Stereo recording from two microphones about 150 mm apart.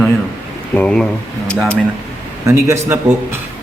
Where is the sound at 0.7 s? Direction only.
5° left (ahead or behind).